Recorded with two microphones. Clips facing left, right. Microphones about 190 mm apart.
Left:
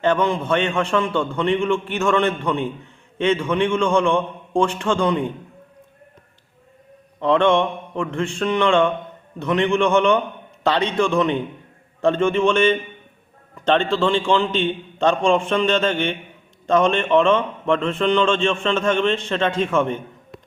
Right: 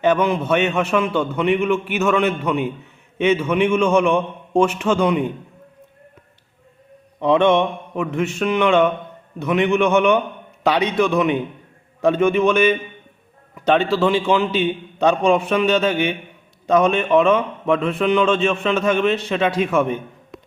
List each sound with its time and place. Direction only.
0.0 s a man's voice: 10° right (ahead or behind)
7.2 s a man's voice: 10° right (ahead or behind)